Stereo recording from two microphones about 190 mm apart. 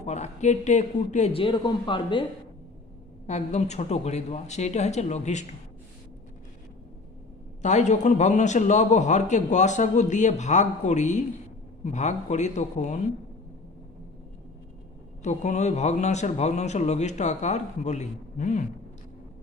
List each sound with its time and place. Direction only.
0.0 s a man's voice: 35° left (ahead or behind)
3.2 s a man's voice: 35° left (ahead or behind)
7.6 s a man's voice: 40° left (ahead or behind)
15.2 s a man's voice: 40° left (ahead or behind)